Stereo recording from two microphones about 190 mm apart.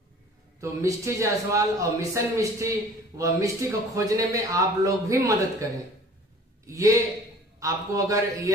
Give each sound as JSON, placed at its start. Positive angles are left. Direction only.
{"t": 0.6, "sound": "a man's voice", "side_deg": -15}
{"t": 6.6, "sound": "a man's voice", "side_deg": -15}